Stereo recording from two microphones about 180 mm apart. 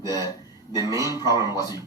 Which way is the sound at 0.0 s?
20° left (ahead or behind).